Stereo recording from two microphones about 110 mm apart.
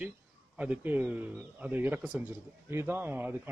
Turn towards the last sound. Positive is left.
turn(degrees=-20)  # may be behind; listen again after turning